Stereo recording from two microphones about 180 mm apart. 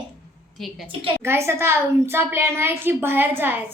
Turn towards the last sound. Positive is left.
turn(degrees=-10)  # may be behind; listen again after turning